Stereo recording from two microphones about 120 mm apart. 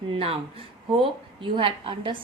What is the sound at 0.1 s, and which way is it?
A woman's voice, 55° right (ahead or behind).